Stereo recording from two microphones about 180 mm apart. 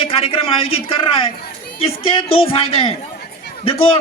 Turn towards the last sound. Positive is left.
turn(degrees=30)  # may be behind; listen again after turning